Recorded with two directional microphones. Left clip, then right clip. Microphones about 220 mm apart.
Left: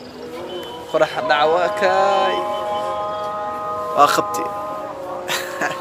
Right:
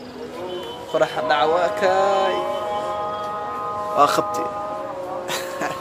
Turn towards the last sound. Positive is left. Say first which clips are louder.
# left 3 dB
turn(degrees=0)  # may be behind; listen again after turning